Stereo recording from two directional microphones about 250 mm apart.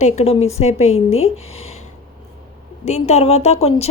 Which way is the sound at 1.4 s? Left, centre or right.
Left.